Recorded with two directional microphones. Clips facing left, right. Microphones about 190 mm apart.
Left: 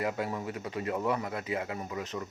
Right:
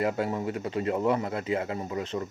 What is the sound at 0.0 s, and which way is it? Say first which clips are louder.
A man's voice: right 5 dB; 30° right (ahead or behind).